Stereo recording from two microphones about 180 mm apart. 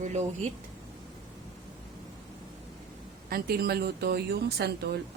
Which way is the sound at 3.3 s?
60° right (ahead or behind).